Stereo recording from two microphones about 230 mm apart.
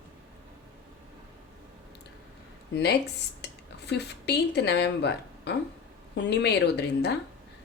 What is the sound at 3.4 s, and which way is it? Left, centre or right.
A woman's voice, left.